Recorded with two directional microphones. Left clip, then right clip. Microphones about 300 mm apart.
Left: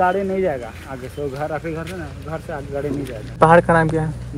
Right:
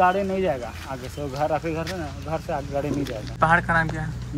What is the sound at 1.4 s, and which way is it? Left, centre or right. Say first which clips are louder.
Speech: right 5 dB; right.